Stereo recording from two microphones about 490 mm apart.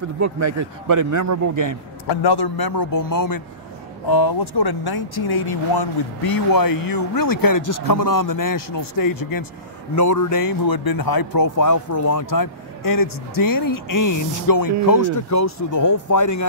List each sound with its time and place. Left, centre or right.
0.2 s a man's voice: right
2.0 s speech: left